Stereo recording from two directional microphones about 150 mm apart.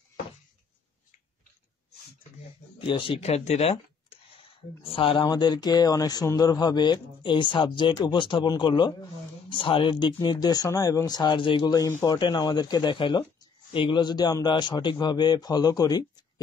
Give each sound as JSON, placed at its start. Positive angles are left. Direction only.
{"t": 2.8, "sound": "speech", "side_deg": 35}